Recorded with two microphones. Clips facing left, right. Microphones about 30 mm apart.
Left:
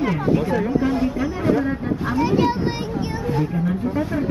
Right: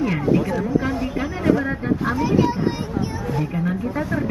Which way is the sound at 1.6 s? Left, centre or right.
Centre.